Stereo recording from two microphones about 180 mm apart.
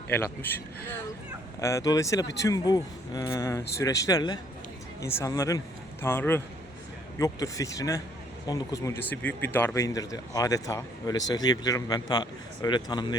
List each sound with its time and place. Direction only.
0.1 s speech: 10° left (ahead or behind)
1.6 s speech: 20° left (ahead or behind)